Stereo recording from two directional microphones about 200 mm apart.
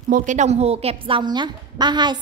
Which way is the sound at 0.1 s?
35° right (ahead or behind).